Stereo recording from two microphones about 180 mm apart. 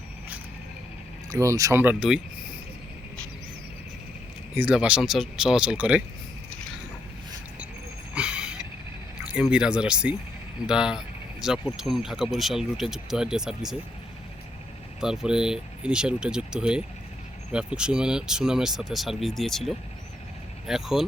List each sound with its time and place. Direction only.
1.3 s speech: 15° right (ahead or behind)
4.5 s speech: 5° right (ahead or behind)
8.1 s a sound: 5° right (ahead or behind)
9.2 s speech: 5° right (ahead or behind)
15.0 s speech: 5° right (ahead or behind)